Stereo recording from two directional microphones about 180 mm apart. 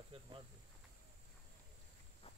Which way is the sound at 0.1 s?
30° right (ahead or behind).